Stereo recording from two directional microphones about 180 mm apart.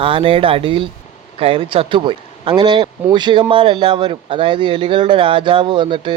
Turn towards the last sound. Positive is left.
turn(degrees=-25)  # may be behind; listen again after turning